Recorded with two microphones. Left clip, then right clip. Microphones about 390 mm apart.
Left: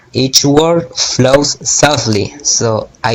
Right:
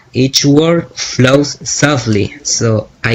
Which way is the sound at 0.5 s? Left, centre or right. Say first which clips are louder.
Even; left.